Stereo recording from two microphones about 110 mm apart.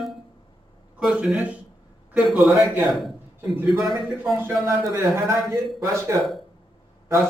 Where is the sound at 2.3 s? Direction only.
5° right (ahead or behind).